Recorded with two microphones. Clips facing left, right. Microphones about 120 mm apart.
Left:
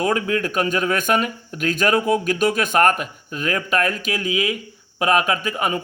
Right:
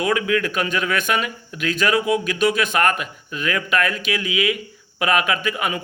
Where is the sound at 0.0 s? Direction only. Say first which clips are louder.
Even; 40° left (ahead or behind).